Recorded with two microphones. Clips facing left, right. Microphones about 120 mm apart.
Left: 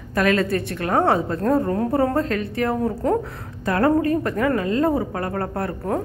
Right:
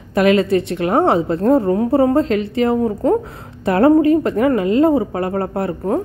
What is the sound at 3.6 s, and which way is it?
Speech, 25° right (ahead or behind).